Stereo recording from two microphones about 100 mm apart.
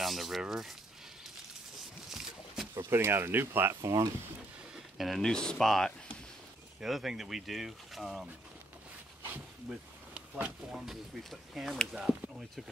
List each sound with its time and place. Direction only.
0.0 s a sound: centre (ahead or behind)
2.0 s a sound: 5° right (ahead or behind)
2.9 s speech: 25° right (ahead or behind)
3.8 s speech: 35° right (ahead or behind)
4.9 s speech: centre (ahead or behind)
9.3 s dog: 15° right (ahead or behind)
10.7 s speech: 5° right (ahead or behind)